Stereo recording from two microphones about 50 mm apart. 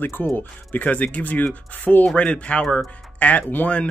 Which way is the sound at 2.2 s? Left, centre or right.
Left.